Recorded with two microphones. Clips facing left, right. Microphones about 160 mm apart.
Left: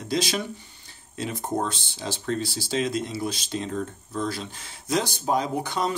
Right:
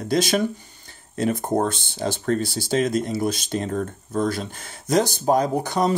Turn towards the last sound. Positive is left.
turn(degrees=-45)  # may be behind; listen again after turning